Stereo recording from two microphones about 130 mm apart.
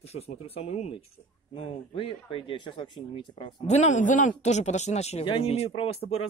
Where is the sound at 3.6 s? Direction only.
60° left (ahead or behind).